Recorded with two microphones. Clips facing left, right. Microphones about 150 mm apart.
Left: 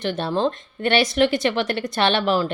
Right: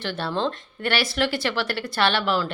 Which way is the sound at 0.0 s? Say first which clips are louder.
Left 4 dB; 20° left (ahead or behind).